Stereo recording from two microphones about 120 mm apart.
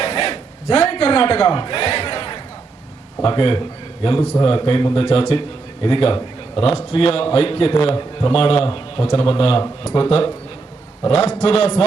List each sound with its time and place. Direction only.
0.0 s a sound: 45° left (ahead or behind)
3.2 s a man's voice: 40° left (ahead or behind)
11.0 s a man's voice: 35° left (ahead or behind)
11.4 s a man's voice: 45° left (ahead or behind)